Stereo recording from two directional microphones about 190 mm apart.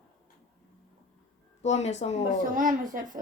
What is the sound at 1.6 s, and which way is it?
Speech, 35° left (ahead or behind).